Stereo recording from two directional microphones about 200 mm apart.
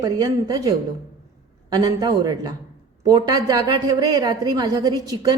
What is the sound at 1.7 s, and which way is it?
A woman's voice, 20° right (ahead or behind).